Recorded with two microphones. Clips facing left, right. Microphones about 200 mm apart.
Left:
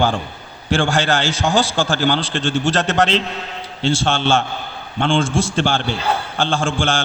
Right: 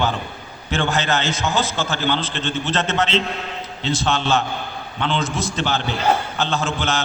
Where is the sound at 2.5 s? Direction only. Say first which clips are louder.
Left 4 dB; 80° left.